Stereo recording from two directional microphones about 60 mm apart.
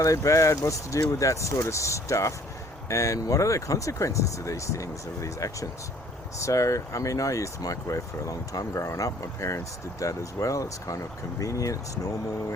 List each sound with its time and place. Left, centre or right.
0.0 s speech: left